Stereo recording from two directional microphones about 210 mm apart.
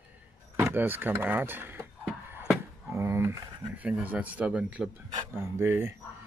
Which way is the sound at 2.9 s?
15° right (ahead or behind).